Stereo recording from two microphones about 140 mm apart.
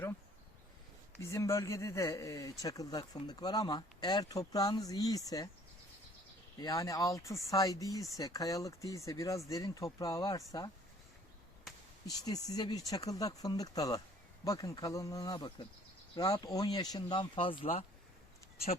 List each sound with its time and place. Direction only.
1.2 s speech: 20° left (ahead or behind)
6.6 s speech: 25° left (ahead or behind)
12.0 s speech: 25° left (ahead or behind)